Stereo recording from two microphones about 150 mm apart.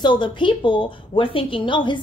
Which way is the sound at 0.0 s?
30° left (ahead or behind).